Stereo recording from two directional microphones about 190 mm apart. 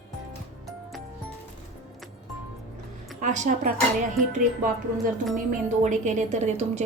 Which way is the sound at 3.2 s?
40° right (ahead or behind).